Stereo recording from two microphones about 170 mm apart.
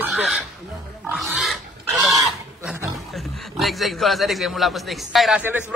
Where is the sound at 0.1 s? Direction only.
Centre (ahead or behind).